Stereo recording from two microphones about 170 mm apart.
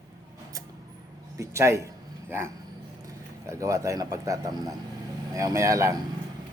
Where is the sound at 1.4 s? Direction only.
15° right (ahead or behind).